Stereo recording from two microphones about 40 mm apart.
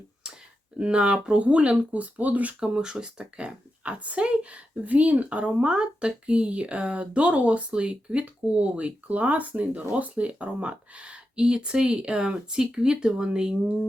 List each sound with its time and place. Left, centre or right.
0.8 s a woman's voice: right
2.6 s a woman's voice: centre; by 5.6 s right
5.6 s speech: right